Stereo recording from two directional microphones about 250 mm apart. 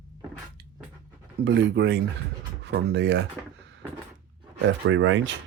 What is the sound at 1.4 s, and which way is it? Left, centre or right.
Speech, right.